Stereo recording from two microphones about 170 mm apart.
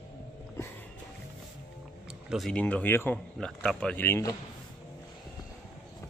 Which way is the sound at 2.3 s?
Centre (ahead or behind).